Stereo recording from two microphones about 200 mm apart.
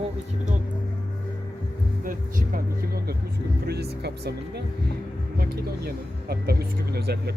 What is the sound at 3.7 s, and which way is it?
Speech, 55° right (ahead or behind).